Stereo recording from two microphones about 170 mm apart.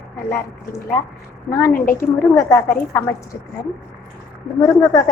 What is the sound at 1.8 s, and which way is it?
Speech, 55° left (ahead or behind).